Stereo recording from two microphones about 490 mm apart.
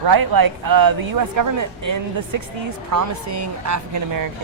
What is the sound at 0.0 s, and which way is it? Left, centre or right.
A woman's voice, right.